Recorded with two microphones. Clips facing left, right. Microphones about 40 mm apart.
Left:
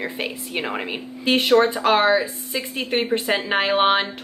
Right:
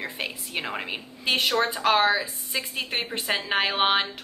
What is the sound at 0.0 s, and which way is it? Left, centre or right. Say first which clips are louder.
A woman's voice: left 5 dB; centre.